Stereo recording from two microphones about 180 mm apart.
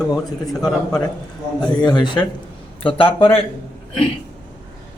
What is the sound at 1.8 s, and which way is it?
A man's voice, 25° left (ahead or behind).